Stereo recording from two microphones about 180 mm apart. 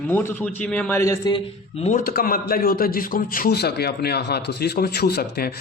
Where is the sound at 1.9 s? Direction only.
50° left (ahead or behind).